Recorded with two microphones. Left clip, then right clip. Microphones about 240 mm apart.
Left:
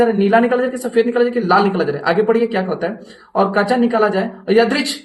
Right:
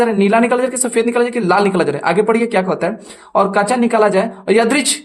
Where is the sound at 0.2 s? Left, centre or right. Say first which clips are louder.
Right 1 dB; right.